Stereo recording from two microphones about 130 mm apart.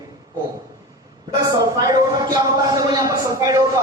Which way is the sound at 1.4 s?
30° right (ahead or behind).